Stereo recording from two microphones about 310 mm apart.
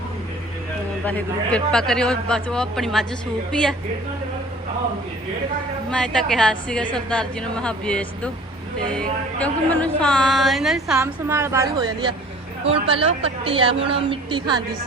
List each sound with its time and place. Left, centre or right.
1.0 s speech: centre
5.9 s a woman's voice: centre